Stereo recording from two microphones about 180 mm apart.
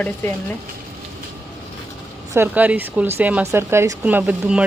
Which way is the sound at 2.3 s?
10° right (ahead or behind).